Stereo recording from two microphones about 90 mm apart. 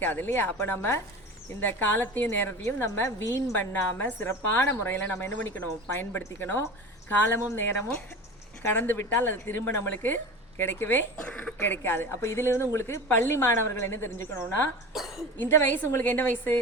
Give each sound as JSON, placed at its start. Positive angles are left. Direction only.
{"t": 0.0, "sound": "a woman's voice", "side_deg": 20}
{"t": 3.6, "sound": "a woman's voice", "side_deg": 20}
{"t": 11.2, "sound": "speech", "side_deg": 10}
{"t": 11.6, "sound": "a woman's voice", "side_deg": 25}
{"t": 14.9, "sound": "a woman's voice", "side_deg": -5}
{"t": 15.4, "sound": "a woman's voice", "side_deg": 25}